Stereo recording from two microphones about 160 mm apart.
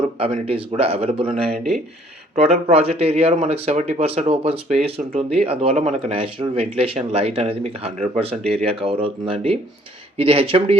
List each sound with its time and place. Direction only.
0.2 s speech: 35° right (ahead or behind)